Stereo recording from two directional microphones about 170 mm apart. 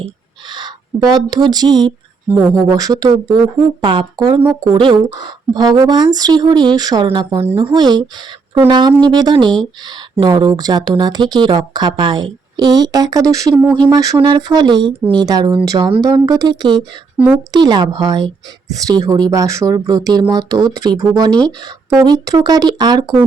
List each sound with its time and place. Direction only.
0.5 s speech: 25° right (ahead or behind)
17.2 s a woman's voice: 10° right (ahead or behind)
17.5 s speech: 25° right (ahead or behind)